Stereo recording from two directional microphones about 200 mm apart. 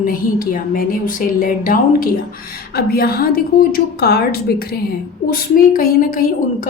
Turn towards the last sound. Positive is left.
turn(degrees=45)  # may be behind; listen again after turning